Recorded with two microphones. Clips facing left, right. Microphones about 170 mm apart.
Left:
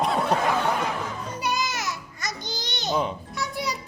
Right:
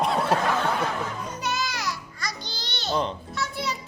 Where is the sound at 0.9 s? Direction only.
10° left (ahead or behind).